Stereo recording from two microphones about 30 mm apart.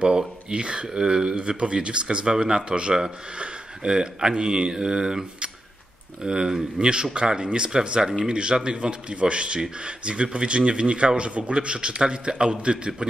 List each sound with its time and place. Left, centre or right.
0.5 s speech: right
6.2 s speech: right